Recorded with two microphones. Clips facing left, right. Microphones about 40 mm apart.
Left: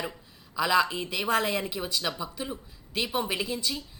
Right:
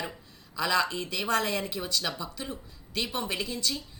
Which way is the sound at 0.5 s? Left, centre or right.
Centre.